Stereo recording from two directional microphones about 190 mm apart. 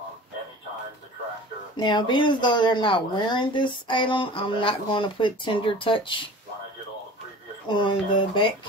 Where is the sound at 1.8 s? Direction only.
25° left (ahead or behind).